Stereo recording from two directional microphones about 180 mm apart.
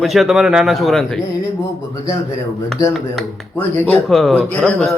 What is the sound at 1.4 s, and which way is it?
Speech, 15° left (ahead or behind).